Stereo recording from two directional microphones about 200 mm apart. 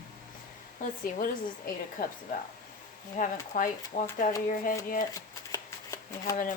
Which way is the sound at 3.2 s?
40° left (ahead or behind).